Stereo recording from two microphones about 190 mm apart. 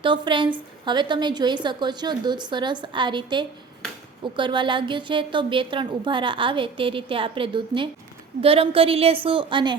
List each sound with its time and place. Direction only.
0.0 s a woman's voice: 25° right (ahead or behind)